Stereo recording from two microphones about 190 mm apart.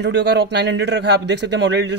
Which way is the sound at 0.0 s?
65° right (ahead or behind).